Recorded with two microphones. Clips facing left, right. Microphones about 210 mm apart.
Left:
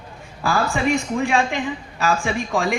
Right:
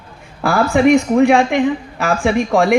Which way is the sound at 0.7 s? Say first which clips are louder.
Right 10 dB; 60° right (ahead or behind).